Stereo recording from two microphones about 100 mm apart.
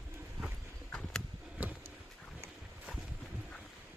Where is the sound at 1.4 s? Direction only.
15° right (ahead or behind).